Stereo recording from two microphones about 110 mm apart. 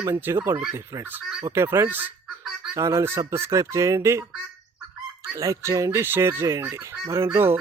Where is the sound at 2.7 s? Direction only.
25° right (ahead or behind).